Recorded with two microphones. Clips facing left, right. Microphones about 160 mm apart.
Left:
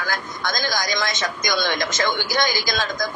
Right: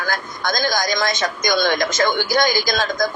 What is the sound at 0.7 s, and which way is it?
Speech, 40° right (ahead or behind).